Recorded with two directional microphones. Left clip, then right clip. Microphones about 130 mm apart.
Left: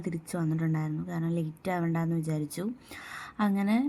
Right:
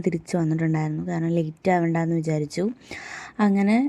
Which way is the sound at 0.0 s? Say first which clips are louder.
Right 9 dB; 45° right (ahead or behind).